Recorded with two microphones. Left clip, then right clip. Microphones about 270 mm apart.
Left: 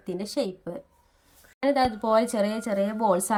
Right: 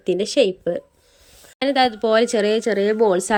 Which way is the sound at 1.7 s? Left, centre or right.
Centre.